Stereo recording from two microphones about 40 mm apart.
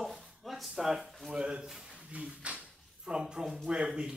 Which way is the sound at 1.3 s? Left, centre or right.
Centre.